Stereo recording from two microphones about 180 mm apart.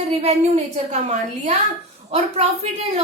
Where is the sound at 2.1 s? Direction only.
35° right (ahead or behind).